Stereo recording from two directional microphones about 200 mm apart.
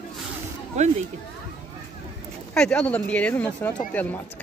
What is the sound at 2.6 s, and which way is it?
Speech, 5° left (ahead or behind).